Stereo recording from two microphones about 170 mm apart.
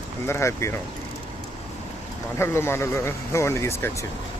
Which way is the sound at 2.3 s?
15° left (ahead or behind).